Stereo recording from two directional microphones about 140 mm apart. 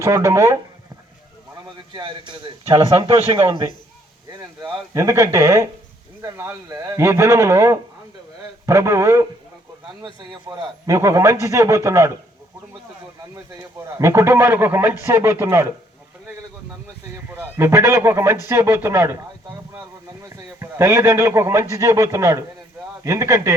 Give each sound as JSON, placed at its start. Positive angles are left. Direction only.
{"t": 0.0, "sound": "a man's voice", "side_deg": -20}
{"t": 1.6, "sound": "a man's voice", "side_deg": -35}
{"t": 4.3, "sound": "a man's voice", "side_deg": -25}
{"t": 10.0, "sound": "a man's voice", "side_deg": -30}
{"t": 10.8, "sound": "a man's voice", "side_deg": -20}
{"t": 13.7, "sound": "a man's voice", "side_deg": -20}
{"t": 17.2, "sound": "a man's voice", "side_deg": -15}
{"t": 20.2, "sound": "a man's voice", "side_deg": -25}